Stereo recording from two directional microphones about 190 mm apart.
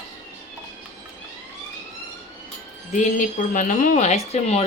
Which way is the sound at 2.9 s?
40° left (ahead or behind).